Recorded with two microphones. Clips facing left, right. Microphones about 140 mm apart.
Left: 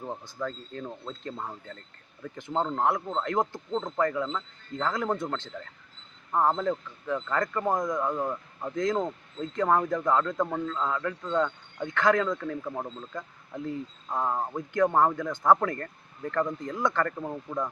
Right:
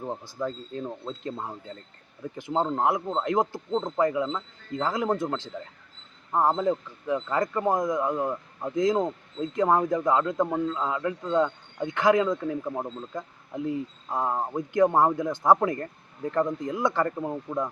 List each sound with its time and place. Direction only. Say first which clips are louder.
0.0 s speech: right 3 dB; 15° right (ahead or behind)